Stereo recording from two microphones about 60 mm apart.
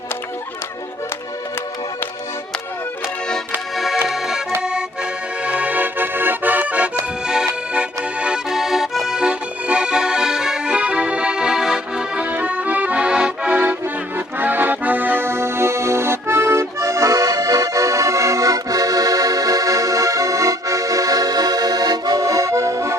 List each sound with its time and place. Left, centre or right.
4.1 s accordion: centre
5.4 s accordion: right
8.4 s accordion: centre
12.2 s accordion: right
13.6 s accordion: right